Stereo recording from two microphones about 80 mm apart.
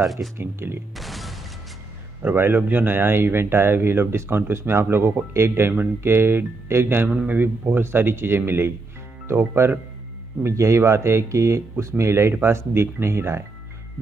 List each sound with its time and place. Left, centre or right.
0.0 s speech: centre
0.4 s speech: right
0.9 s a sound: centre
2.2 s speech: right